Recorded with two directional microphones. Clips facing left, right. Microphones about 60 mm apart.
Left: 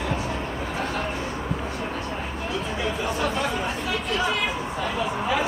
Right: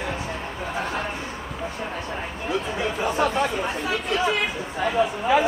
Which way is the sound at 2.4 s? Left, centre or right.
Centre.